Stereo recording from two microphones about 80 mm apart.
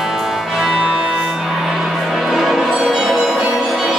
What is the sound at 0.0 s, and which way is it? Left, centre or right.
Music, centre.